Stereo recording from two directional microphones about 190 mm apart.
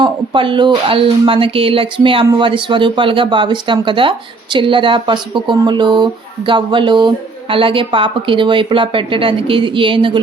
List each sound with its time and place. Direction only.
0.0 s speech: 25° right (ahead or behind)